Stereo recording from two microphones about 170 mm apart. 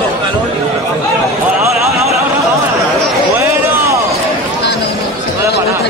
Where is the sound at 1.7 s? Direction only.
Centre (ahead or behind).